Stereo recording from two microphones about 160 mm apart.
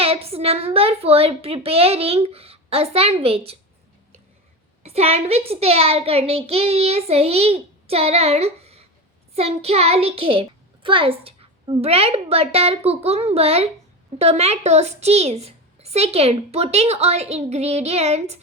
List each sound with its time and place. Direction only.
0.0 s a woman's voice: 40° right (ahead or behind)
4.8 s a woman's voice: 40° right (ahead or behind)